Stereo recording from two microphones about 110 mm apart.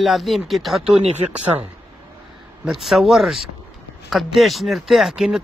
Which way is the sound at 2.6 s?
Centre (ahead or behind).